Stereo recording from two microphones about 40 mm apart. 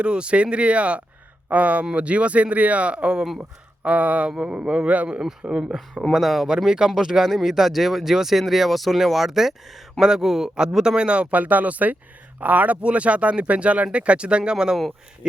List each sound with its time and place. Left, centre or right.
0.0 s speech: right
3.8 s speech: right
4.3 s speech: right
5.4 s speech: right
5.9 s speech: centre
6.7 s speech: centre
14.5 s speech: centre